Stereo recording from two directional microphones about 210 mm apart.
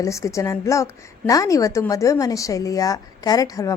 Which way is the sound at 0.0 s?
15° left (ahead or behind).